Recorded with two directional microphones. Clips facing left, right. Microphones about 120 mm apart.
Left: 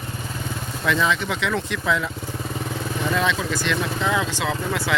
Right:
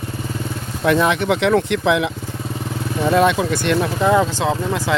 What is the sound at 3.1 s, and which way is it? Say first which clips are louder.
Speech: right 9 dB; 55° right (ahead or behind).